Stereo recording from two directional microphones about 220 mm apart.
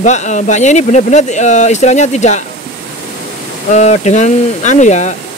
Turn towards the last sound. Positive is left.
turn(degrees=35)  # may be behind; listen again after turning